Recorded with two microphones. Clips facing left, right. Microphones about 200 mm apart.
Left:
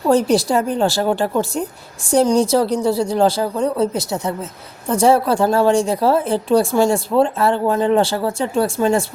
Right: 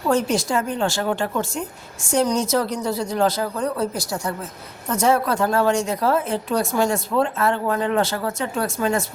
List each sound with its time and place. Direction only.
0.1 s a woman's voice: 35° left (ahead or behind)